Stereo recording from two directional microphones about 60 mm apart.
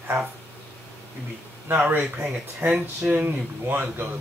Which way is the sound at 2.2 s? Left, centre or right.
Centre.